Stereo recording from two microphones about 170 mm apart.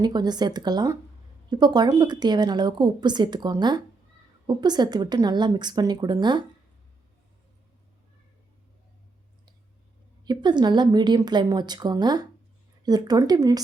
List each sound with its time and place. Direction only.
0.0 s a woman's voice: 25° right (ahead or behind)
10.2 s a woman's voice: 25° right (ahead or behind)